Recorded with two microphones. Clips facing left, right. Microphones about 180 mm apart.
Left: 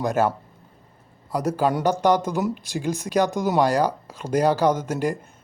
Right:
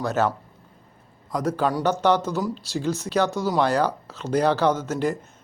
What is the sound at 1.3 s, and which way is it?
Speech, 10° left (ahead or behind).